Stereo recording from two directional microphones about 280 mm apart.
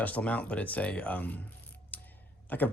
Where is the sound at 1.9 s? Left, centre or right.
Centre.